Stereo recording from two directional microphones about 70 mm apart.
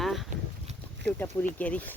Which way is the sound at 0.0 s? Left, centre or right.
Centre.